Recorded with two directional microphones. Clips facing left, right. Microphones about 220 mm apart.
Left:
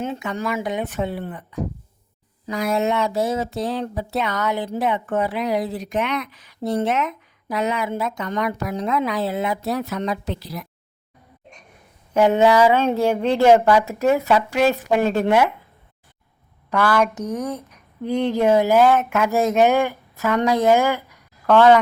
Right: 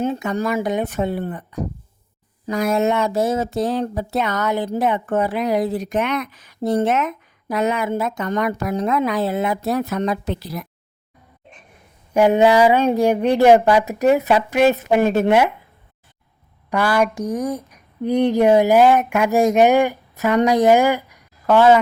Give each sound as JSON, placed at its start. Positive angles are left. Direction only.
{"t": 0.0, "sound": "speech", "side_deg": -40}
{"t": 12.1, "sound": "speech", "side_deg": -15}
{"t": 16.6, "sound": "speech", "side_deg": -10}